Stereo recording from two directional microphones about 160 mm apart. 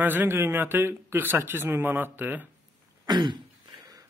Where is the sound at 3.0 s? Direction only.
25° right (ahead or behind).